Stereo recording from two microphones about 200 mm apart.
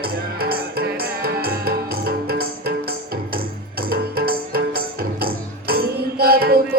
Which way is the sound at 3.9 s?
50° right (ahead or behind).